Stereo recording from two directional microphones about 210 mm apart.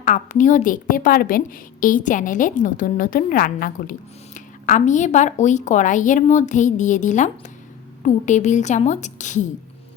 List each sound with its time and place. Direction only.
0.0 s a woman's voice: 35° left (ahead or behind)